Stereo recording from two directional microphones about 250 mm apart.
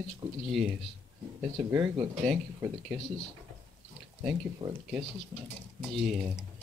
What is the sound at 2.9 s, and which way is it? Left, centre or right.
Speech, centre.